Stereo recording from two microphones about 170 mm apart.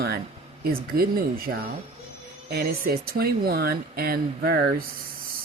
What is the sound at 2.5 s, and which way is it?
Speech, 65° right (ahead or behind).